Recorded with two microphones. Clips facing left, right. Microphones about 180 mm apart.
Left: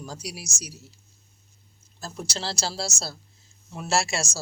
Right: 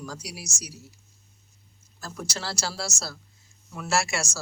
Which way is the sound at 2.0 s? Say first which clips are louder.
Left 2 dB; 25° left (ahead or behind).